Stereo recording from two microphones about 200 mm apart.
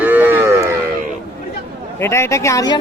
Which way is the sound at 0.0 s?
10° right (ahead or behind).